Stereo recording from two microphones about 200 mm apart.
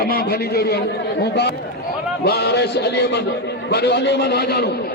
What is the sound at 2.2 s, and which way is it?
Music, 55° left (ahead or behind).